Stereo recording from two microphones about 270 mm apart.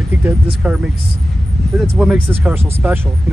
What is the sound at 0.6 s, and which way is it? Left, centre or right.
Speech, centre.